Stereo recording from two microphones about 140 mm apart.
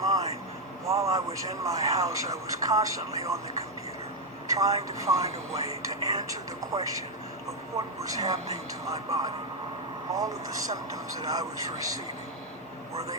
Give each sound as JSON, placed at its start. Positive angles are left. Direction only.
{"t": 0.0, "sound": "vehicle", "side_deg": -25}
{"t": 0.9, "sound": "speech", "side_deg": -20}
{"t": 4.4, "sound": "speech", "side_deg": -25}
{"t": 7.9, "sound": "speech", "side_deg": -25}